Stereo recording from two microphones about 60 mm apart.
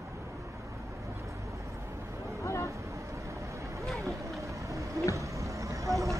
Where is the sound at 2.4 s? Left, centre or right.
Left.